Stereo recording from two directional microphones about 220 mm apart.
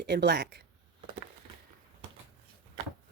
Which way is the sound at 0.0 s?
50° right (ahead or behind).